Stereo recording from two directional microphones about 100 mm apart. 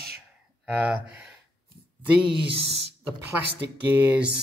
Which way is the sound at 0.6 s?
15° right (ahead or behind).